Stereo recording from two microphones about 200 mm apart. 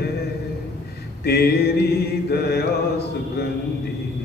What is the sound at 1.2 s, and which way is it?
Mantra, 50° left (ahead or behind).